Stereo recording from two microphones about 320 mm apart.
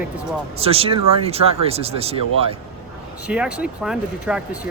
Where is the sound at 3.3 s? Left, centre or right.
Centre.